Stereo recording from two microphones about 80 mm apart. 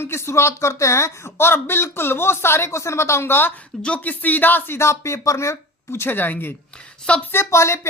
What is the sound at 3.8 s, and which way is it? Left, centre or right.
Speech, centre.